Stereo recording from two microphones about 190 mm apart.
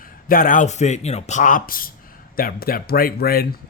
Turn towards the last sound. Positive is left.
turn(degrees=55)  # may be behind; listen again after turning